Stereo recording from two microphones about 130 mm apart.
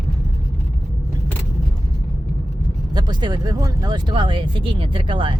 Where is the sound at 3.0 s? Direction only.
35° right (ahead or behind).